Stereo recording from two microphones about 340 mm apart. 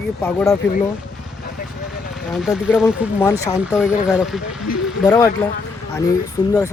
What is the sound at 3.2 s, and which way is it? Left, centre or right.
Speech, centre.